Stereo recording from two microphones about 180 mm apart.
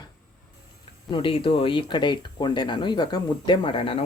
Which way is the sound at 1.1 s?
30° left (ahead or behind).